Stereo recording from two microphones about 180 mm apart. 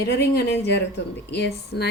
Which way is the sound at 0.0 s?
65° left (ahead or behind).